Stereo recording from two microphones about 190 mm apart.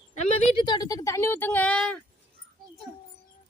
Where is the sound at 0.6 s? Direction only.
20° left (ahead or behind); by 2.0 s 5° left (ahead or behind).